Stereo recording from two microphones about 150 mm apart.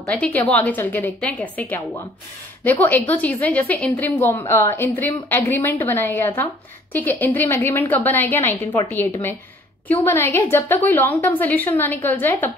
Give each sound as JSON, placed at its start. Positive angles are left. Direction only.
{"t": 0.0, "sound": "a woman's voice", "side_deg": 10}
{"t": 10.0, "sound": "a woman's voice", "side_deg": 15}